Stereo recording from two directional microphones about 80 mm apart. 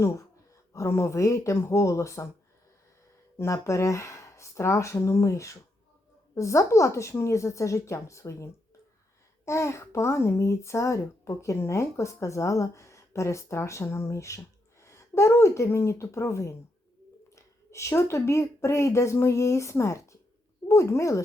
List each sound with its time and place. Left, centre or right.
0.7 s speech: left
3.3 s speech: left
9.5 s speech: left